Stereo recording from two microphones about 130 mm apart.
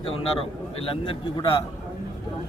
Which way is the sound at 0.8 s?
45° left (ahead or behind).